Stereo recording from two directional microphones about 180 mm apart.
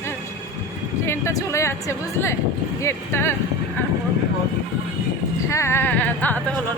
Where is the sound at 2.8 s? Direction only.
15° left (ahead or behind).